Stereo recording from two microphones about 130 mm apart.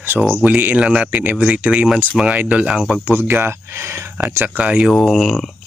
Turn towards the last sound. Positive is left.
turn(degrees=0)  # may be behind; listen again after turning